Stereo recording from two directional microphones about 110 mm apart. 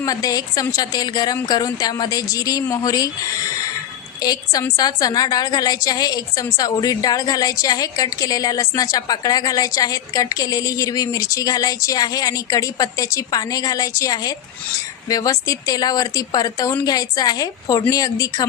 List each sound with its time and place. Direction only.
0.0 s a woman's voice: 35° left (ahead or behind)
4.2 s a woman's voice: 35° left (ahead or behind)